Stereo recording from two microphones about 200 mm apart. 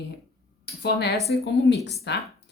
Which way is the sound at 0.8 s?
55° left (ahead or behind).